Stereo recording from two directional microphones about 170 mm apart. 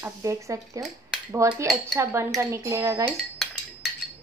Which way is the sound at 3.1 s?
Centre (ahead or behind).